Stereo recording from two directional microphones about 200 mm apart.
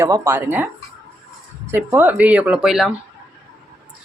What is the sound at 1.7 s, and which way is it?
Speech, 10° right (ahead or behind).